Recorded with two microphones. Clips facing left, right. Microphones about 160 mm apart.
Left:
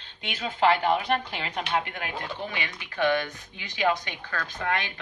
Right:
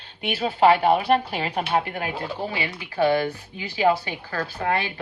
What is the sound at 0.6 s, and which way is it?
Speech, 10° right (ahead or behind).